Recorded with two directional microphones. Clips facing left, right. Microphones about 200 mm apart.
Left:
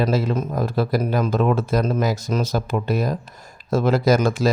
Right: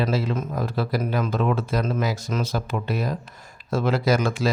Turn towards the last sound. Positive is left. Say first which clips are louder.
# left 4 dB
turn(degrees=40)  # may be behind; listen again after turning